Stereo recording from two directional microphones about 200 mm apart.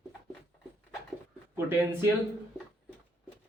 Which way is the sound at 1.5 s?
10° right (ahead or behind).